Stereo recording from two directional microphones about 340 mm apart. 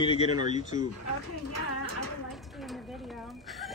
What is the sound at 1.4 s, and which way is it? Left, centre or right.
Speech, left.